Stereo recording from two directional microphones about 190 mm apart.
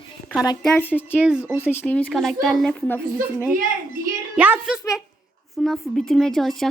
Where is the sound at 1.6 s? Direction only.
10° left (ahead or behind).